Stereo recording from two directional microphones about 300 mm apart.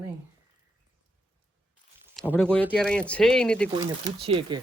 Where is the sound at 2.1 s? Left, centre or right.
Centre.